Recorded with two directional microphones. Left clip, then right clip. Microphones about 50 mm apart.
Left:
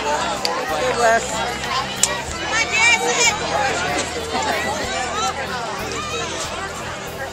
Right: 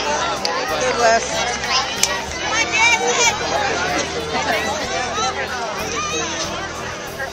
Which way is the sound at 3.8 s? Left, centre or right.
Right.